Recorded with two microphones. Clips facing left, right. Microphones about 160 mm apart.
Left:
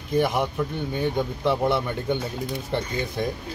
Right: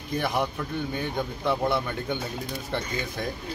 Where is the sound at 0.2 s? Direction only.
15° left (ahead or behind).